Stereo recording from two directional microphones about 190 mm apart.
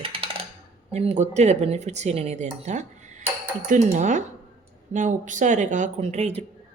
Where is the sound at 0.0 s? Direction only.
30° right (ahead or behind).